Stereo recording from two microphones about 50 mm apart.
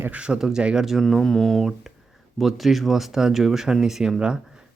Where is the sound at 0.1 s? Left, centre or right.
Centre.